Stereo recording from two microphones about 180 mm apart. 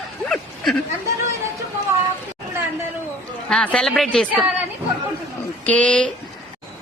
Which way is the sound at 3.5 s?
5° left (ahead or behind).